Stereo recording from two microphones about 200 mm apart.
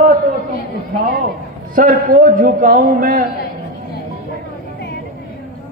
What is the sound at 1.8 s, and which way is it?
A man's voice, 40° right (ahead or behind).